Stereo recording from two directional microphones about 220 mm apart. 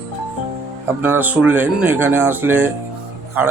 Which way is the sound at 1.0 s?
10° right (ahead or behind).